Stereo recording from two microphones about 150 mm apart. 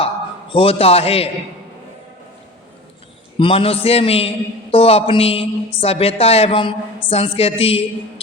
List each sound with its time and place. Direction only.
0.5 s speech: 40° left (ahead or behind)
3.3 s speech: 35° left (ahead or behind)